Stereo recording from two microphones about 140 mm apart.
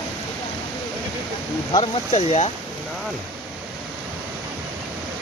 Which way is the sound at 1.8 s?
50° left (ahead or behind).